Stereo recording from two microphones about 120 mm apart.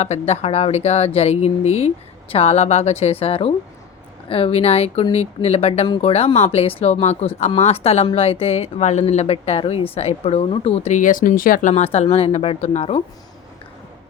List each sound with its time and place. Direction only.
0.0 s speech: 60° left (ahead or behind)